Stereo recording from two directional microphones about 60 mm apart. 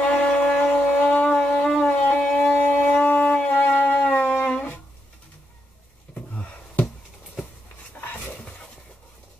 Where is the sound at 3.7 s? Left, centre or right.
Left.